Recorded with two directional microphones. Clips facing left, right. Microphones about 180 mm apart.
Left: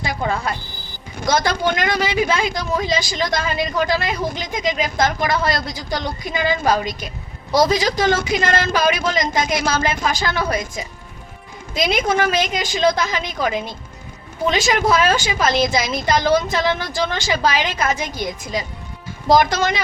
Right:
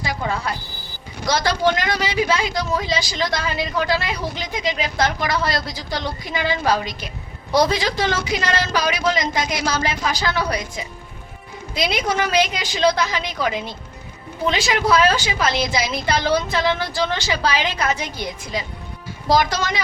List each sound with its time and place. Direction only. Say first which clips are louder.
0.0 s vehicle: left 2 dB; 50° left (ahead or behind)
1.2 s speech: even; 50° left (ahead or behind)
11.8 s speech: left 3 dB; 50° left (ahead or behind)
19.3 s speech: left 3 dB; 50° left (ahead or behind)